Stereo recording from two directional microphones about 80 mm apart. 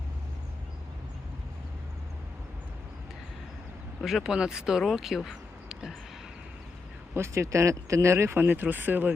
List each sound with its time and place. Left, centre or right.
4.0 s speech: centre
7.1 s speech: right